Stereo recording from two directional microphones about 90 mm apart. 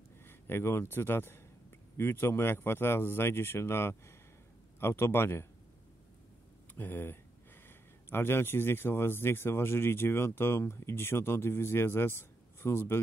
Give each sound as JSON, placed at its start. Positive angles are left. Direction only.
{"t": 0.3, "sound": "speech", "side_deg": 25}
{"t": 6.7, "sound": "speech", "side_deg": 20}